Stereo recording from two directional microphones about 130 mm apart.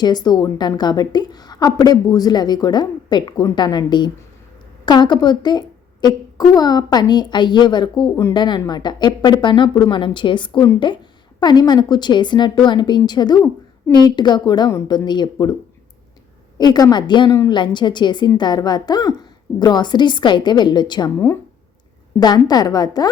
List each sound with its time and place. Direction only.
0.0 s a woman's voice: 30° left (ahead or behind)
16.6 s a woman's voice: 30° left (ahead or behind)
22.2 s a woman's voice: 30° left (ahead or behind)